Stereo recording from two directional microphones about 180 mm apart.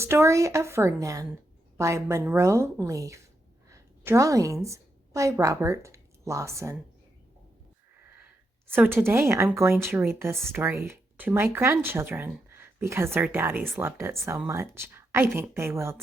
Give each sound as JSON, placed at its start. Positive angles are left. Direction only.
{"t": 0.0, "sound": "a woman's voice", "side_deg": -15}
{"t": 8.7, "sound": "speech", "side_deg": -10}